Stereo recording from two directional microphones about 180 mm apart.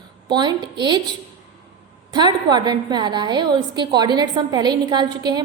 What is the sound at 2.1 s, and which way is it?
A woman's voice, 25° right (ahead or behind).